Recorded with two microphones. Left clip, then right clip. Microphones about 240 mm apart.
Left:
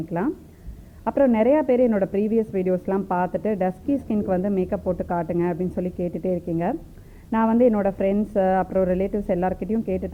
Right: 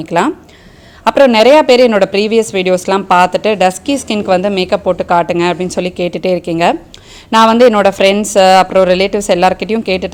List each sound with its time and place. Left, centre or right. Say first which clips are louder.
0.1 s a woman's voice: right 16 dB; right